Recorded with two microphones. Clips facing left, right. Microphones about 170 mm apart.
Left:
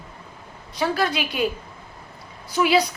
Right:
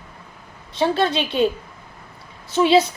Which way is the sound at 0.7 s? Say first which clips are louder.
Right 4 dB; 25° right (ahead or behind).